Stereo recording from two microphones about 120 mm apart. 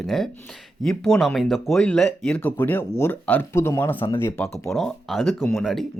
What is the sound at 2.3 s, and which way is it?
Speech, 15° left (ahead or behind).